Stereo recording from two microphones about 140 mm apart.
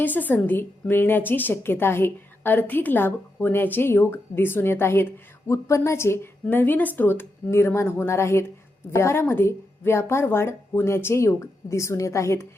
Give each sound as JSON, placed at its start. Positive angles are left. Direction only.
{"t": 0.0, "sound": "a woman's voice", "side_deg": 10}